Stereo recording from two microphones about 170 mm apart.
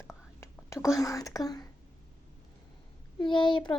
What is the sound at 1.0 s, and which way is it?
Speech, 20° left (ahead or behind).